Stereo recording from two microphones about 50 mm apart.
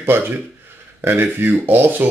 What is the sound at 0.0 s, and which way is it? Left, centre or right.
Speech, right.